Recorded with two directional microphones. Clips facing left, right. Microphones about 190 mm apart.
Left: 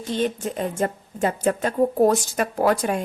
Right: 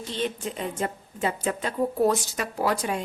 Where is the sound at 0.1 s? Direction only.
45° left (ahead or behind).